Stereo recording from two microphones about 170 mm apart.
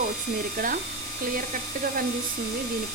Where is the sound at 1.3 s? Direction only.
55° right (ahead or behind).